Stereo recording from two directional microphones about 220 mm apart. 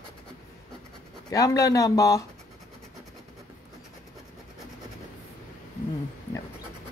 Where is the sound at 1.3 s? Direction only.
15° left (ahead or behind).